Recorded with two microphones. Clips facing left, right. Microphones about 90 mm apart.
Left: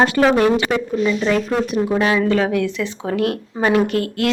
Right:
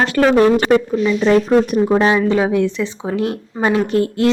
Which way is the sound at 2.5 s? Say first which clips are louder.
Right 3 dB; 25° right (ahead or behind).